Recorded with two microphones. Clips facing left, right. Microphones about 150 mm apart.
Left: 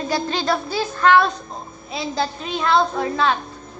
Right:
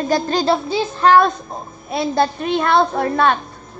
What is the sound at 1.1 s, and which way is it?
A woman's voice, 50° right (ahead or behind).